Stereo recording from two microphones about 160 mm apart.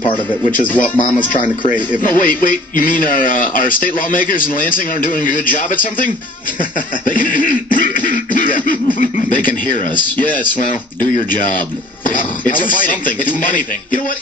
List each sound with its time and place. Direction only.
0.5 s a man's voice: 55° left (ahead or behind)